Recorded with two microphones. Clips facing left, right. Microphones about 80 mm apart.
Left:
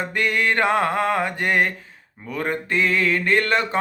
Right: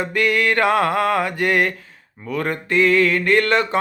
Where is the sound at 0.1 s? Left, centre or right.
Left.